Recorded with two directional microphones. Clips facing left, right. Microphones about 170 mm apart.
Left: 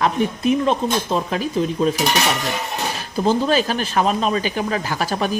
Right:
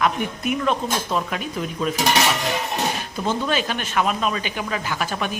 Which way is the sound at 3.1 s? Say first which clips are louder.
Left 8 dB; 35° left (ahead or behind).